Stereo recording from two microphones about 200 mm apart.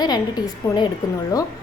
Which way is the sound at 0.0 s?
20° left (ahead or behind).